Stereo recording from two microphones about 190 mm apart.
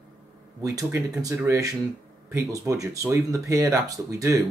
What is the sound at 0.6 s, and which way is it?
Speech, 15° right (ahead or behind).